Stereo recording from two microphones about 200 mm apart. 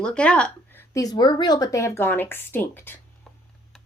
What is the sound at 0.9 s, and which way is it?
A woman's voice, 20° left (ahead or behind).